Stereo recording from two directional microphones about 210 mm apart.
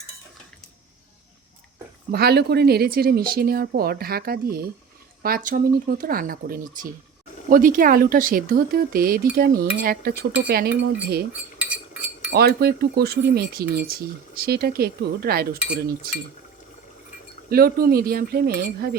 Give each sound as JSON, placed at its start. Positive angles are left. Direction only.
{"t": 2.1, "sound": "speech", "side_deg": -50}
{"t": 11.6, "sound": "chink", "side_deg": -5}
{"t": 12.3, "sound": "speech", "side_deg": -50}
{"t": 17.5, "sound": "speech", "side_deg": -45}